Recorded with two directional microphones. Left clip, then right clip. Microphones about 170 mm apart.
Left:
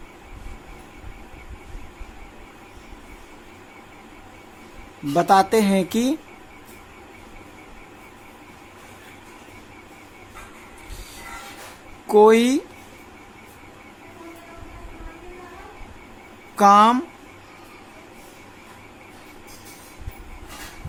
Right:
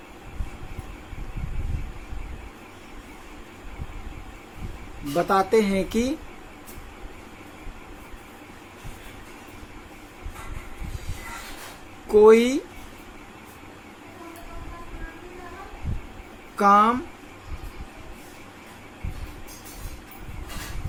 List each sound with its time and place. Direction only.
5.1 s speech: 50° left (ahead or behind)
12.0 s speech: 35° left (ahead or behind)
16.6 s speech: 50° left (ahead or behind)